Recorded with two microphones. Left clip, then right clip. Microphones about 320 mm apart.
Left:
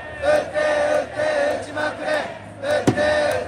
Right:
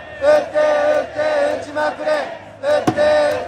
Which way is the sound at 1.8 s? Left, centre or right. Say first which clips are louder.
Right 5 dB; centre.